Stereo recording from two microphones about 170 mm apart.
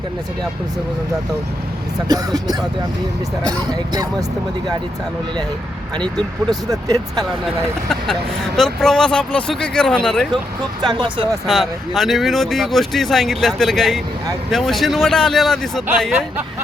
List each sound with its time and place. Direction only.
2.0 s speech: 20° right (ahead or behind)
6.1 s speech: 20° right (ahead or behind)
8.5 s speech: centre (ahead or behind)
10.8 s speech: 30° right (ahead or behind)
11.4 s speech: centre (ahead or behind)